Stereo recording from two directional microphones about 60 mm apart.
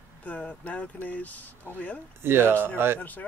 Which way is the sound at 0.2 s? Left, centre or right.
Left.